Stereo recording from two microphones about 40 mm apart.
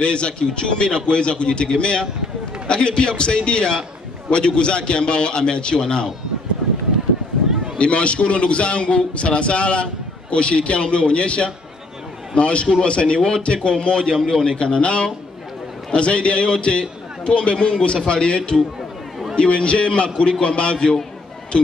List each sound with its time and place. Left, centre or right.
0.0 s a man's voice: left
7.7 s a man's voice: left